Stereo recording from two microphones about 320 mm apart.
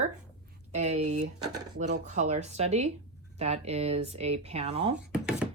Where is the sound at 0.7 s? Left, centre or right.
Right.